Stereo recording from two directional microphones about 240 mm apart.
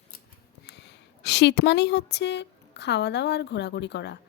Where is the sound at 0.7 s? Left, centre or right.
Left.